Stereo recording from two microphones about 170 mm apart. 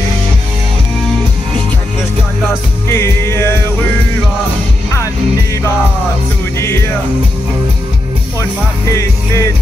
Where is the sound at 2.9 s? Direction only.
15° left (ahead or behind).